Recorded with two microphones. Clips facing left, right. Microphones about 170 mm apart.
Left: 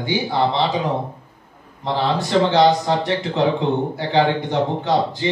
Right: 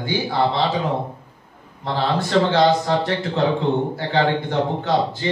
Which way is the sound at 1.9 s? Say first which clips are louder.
Left 1 dB; 20° left (ahead or behind).